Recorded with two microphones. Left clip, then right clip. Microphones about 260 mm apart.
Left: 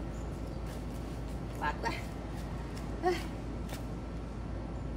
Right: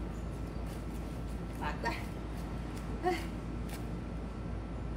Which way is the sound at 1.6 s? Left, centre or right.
Centre.